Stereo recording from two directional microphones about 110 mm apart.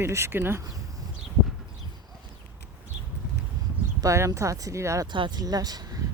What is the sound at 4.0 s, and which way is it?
Speech, 30° right (ahead or behind).